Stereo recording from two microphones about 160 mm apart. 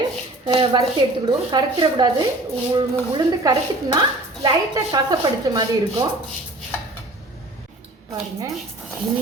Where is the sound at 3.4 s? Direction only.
25° right (ahead or behind).